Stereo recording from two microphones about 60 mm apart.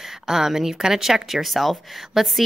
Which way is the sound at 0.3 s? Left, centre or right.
Centre.